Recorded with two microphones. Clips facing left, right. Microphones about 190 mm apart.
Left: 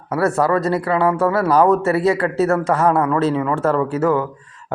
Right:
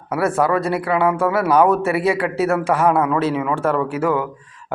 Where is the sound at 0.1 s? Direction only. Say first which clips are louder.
Left 1 dB; centre (ahead or behind).